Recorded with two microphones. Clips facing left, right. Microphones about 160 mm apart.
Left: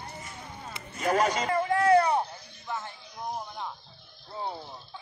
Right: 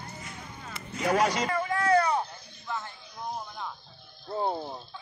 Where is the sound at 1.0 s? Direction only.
45° left (ahead or behind).